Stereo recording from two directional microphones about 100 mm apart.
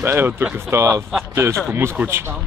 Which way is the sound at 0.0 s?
25° right (ahead or behind).